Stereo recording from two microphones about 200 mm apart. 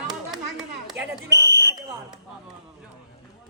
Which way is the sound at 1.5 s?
55° right (ahead or behind).